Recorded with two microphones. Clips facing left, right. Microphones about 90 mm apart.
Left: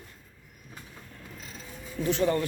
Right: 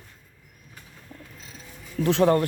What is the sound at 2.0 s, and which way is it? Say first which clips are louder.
Speech: right 6 dB; 75° right (ahead or behind).